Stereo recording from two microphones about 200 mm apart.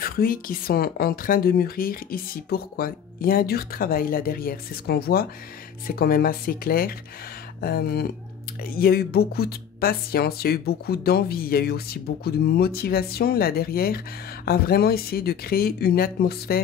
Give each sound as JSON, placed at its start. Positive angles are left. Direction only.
{"t": 0.0, "sound": "speech", "side_deg": 45}